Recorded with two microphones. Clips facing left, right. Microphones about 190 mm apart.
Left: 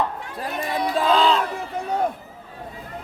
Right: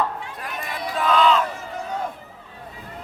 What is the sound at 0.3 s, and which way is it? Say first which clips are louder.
Run: left 6 dB; 30° left (ahead or behind).